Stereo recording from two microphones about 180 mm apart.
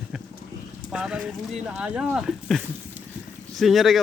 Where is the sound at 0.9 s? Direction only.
5° right (ahead or behind).